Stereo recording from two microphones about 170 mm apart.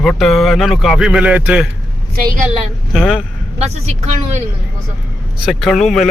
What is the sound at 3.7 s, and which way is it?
Speech, 45° right (ahead or behind).